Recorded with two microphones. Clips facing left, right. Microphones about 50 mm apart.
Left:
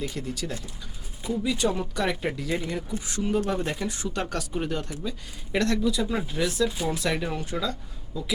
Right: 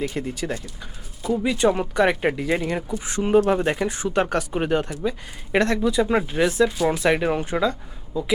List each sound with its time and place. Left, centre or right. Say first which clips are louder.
0.0 s speech: right 5 dB; right